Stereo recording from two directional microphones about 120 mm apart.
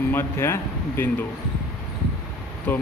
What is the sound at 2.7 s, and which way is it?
Speech, 15° left (ahead or behind).